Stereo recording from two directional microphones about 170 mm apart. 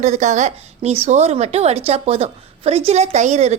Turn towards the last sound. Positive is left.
turn(degrees=-40)  # may be behind; listen again after turning